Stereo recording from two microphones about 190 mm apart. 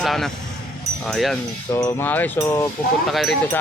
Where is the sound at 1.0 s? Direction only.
Centre (ahead or behind).